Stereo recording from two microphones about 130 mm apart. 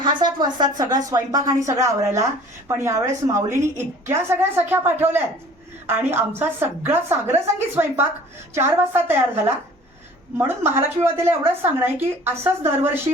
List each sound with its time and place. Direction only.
0.0 s a woman's voice: 35° right (ahead or behind); by 12.5 s 15° right (ahead or behind)